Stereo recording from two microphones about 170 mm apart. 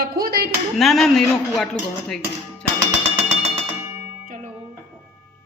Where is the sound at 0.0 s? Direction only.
65° right (ahead or behind).